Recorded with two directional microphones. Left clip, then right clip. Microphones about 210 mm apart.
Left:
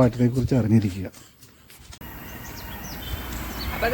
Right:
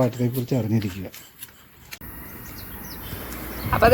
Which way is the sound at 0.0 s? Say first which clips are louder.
Left 2 dB; 20° left (ahead or behind).